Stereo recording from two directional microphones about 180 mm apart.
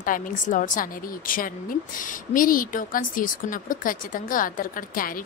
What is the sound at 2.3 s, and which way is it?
Speech, 50° left (ahead or behind).